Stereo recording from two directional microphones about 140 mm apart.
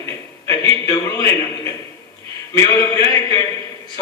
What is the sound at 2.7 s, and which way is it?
Speech, 30° left (ahead or behind).